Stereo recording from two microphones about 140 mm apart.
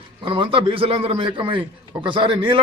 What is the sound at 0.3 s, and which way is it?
A man's voice, 40° right (ahead or behind).